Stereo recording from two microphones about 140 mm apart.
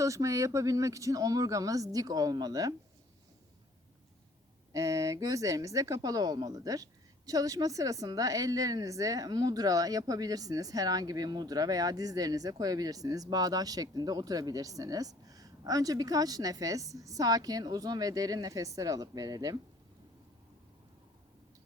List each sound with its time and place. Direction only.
0.0 s a woman's voice: 20° right (ahead or behind)
4.7 s a woman's voice: 25° right (ahead or behind)